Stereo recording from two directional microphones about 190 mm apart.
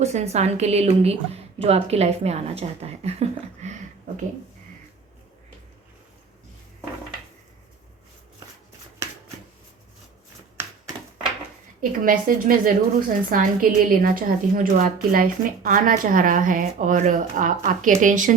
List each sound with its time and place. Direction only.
0.0 s a woman's voice: 35° right (ahead or behind)
9.0 s shuffling cards: 15° right (ahead or behind)
10.6 s typewriter: 10° right (ahead or behind)
11.8 s speech: 50° right (ahead or behind)